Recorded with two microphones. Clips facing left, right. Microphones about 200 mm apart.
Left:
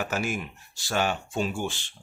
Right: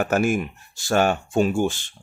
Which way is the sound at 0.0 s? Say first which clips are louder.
Right 9 dB; 50° right (ahead or behind).